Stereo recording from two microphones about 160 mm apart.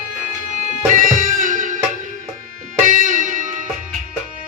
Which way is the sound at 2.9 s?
55° right (ahead or behind).